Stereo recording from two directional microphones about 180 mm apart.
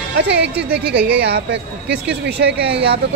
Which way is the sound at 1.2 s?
70° right (ahead or behind).